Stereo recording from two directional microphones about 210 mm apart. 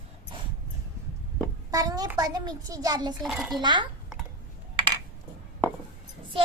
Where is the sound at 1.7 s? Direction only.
15° right (ahead or behind).